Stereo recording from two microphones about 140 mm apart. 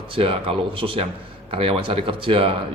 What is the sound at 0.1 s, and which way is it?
Speech, 40° right (ahead or behind).